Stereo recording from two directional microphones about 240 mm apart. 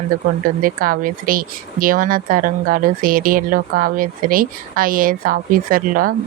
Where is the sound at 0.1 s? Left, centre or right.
Right.